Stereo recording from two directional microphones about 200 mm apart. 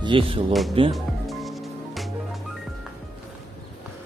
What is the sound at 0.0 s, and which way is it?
Speech, 25° right (ahead or behind).